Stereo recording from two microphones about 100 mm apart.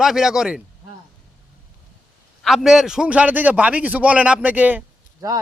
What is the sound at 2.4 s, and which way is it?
A man's voice, centre (ahead or behind).